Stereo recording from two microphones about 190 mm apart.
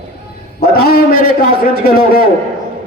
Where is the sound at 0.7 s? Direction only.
50° left (ahead or behind).